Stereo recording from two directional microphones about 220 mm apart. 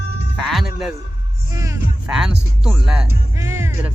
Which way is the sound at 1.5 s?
15° right (ahead or behind).